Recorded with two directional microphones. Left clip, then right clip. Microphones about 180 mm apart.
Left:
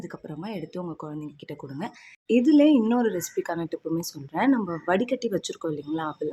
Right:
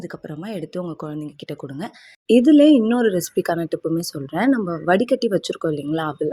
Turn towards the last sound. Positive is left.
turn(degrees=-35)  # may be behind; listen again after turning